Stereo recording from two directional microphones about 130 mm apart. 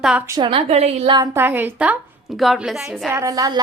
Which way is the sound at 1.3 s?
15° right (ahead or behind).